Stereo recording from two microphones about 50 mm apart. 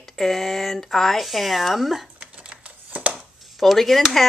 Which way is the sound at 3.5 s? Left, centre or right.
Centre.